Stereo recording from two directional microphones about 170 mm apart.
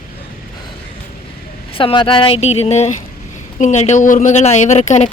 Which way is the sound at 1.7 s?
30° left (ahead or behind).